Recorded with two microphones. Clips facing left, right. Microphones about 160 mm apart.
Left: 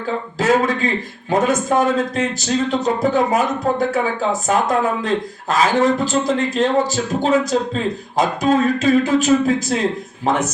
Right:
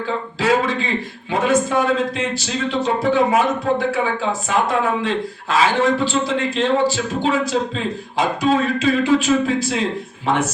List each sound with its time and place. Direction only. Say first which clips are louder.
0.3 s a man's voice: left 2 dB; 45° left (ahead or behind)